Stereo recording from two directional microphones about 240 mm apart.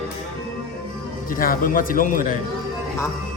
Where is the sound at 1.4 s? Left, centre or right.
Left.